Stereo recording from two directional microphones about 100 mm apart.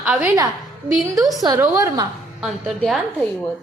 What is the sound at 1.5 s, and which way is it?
Speech, 25° right (ahead or behind).